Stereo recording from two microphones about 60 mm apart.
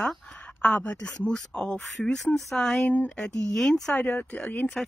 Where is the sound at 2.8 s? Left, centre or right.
Left.